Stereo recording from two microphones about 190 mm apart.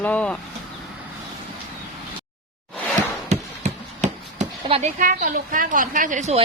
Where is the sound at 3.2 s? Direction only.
35° right (ahead or behind).